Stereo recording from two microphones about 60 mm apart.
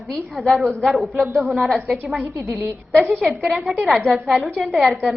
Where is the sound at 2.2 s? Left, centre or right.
Right.